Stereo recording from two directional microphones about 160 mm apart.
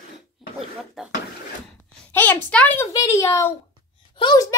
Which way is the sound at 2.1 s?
10° left (ahead or behind).